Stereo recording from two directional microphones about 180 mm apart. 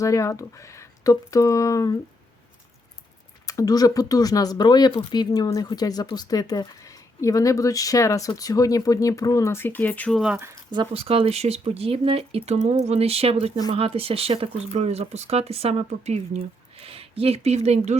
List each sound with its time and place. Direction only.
0.0 s speech: 15° left (ahead or behind)
3.4 s speech: 20° left (ahead or behind); by 10.3 s centre (ahead or behind)
10.7 s speech: 30° right (ahead or behind)